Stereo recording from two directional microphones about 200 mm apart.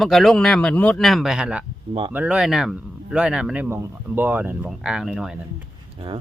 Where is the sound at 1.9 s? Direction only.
25° right (ahead or behind).